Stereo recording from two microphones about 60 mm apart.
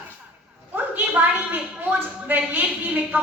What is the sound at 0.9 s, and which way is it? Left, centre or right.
A woman's voice, right.